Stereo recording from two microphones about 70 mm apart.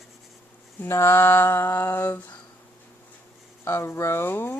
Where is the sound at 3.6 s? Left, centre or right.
Left.